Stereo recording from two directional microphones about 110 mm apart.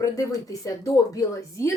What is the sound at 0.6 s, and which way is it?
A woman's voice, 30° left (ahead or behind).